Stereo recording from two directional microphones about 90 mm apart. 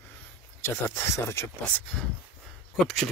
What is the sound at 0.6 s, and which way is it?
Speech, 30° left (ahead or behind).